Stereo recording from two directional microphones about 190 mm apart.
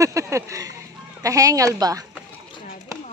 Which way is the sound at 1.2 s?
15° right (ahead or behind).